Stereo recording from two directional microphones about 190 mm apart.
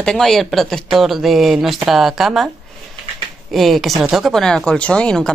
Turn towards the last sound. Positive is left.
turn(degrees=5)  # may be behind; listen again after turning